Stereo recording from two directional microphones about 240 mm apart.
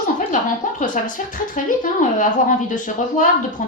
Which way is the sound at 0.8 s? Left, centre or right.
Left.